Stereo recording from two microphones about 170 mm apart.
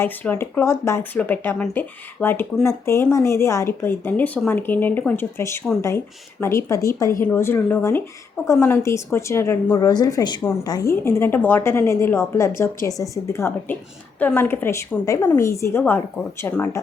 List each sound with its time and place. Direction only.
0.0 s a woman's voice: 10° left (ahead or behind)